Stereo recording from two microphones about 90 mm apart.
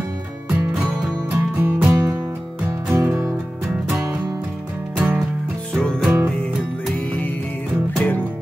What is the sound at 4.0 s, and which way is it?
Music, 20° right (ahead or behind).